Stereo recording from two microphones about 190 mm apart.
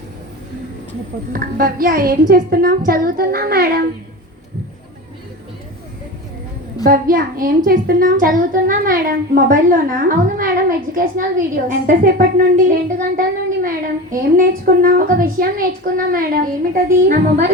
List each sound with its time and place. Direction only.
1.3 s a woman's voice: 50° right (ahead or behind)
6.8 s a woman's voice: 50° right (ahead or behind)